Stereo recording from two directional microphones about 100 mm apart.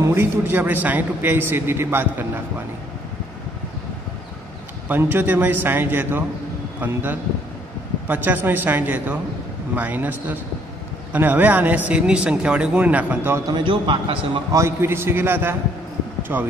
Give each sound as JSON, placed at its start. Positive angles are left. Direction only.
{"t": 0.0, "sound": "a man's voice", "side_deg": -20}
{"t": 4.8, "sound": "a man's voice", "side_deg": -20}
{"t": 13.5, "sound": "a man's voice", "side_deg": -55}
{"t": 14.5, "sound": "a man's voice", "side_deg": -25}
{"t": 16.2, "sound": "a sound", "side_deg": -20}